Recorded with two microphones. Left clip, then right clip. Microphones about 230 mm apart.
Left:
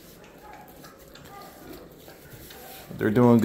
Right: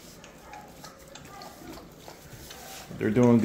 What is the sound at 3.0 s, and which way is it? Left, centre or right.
Speech, centre.